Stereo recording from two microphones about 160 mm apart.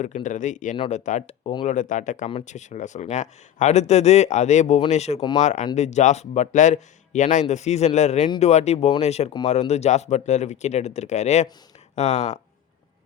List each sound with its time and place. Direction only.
0.0 s speech: 50° left (ahead or behind)